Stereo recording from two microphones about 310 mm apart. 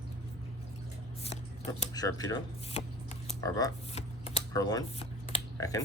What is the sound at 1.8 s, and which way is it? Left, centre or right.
Shuffling cards, centre.